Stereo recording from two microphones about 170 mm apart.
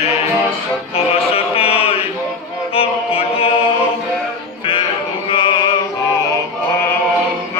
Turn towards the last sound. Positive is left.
turn(degrees=25)  # may be behind; listen again after turning